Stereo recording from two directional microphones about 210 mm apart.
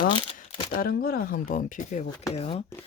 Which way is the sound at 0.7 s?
45° left (ahead or behind).